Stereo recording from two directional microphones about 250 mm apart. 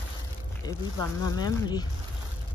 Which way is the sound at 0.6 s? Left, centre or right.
Centre.